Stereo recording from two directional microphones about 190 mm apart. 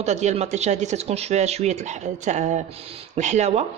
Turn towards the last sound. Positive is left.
turn(degrees=-35)  # may be behind; listen again after turning